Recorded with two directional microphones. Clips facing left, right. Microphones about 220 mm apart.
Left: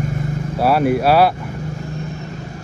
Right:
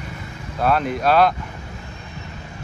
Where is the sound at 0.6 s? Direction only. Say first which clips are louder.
Left 5 dB; 10° left (ahead or behind).